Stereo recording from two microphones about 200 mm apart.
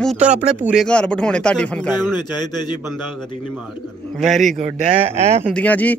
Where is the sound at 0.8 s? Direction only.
5° left (ahead or behind).